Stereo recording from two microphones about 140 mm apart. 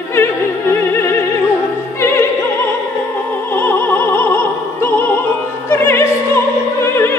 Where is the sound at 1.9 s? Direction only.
20° left (ahead or behind).